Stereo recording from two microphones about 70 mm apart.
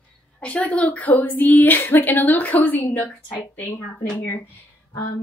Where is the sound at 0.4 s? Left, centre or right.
Centre.